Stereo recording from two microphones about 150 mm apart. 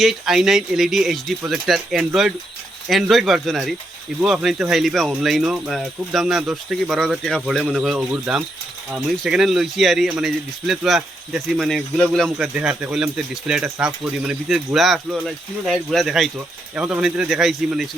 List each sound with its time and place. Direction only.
0.0 s speech: centre (ahead or behind)